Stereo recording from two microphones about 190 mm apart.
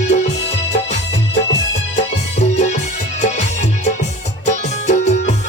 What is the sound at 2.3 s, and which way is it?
Music, 35° left (ahead or behind).